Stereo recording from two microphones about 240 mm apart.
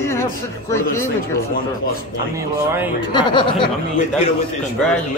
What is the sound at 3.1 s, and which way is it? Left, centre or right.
Speech, centre.